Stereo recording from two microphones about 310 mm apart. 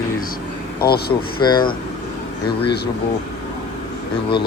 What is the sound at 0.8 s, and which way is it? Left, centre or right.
Speech, left.